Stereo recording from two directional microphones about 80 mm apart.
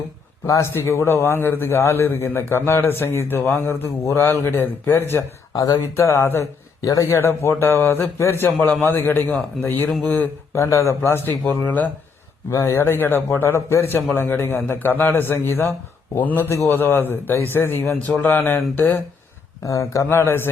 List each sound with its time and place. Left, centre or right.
0.4 s a man's voice: left
0.7 s a man's voice: left
5.5 s speech: left
6.8 s a man's voice: left
7.2 s a man's voice: left
8.4 s a man's voice: centre
10.5 s speech: left
11.3 s a man's voice: centre
12.5 s a man's voice: left
19.6 s speech: left